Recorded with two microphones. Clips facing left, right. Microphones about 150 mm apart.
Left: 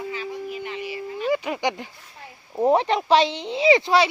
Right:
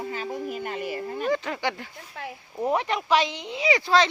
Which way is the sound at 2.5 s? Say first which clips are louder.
Left 6 dB; 30° left (ahead or behind).